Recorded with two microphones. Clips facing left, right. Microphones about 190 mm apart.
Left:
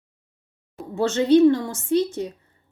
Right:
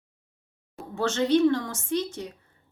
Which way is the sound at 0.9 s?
15° left (ahead or behind).